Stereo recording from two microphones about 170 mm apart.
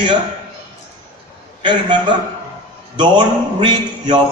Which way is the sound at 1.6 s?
25° right (ahead or behind).